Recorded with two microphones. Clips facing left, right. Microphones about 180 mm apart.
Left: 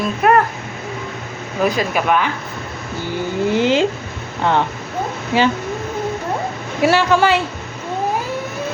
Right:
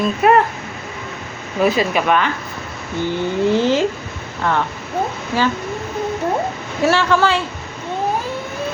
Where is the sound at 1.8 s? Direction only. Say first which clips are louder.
Right 1 dB; 5° left (ahead or behind).